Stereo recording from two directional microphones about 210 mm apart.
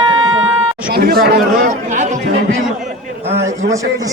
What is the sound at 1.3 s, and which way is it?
A man's voice, 40° right (ahead or behind).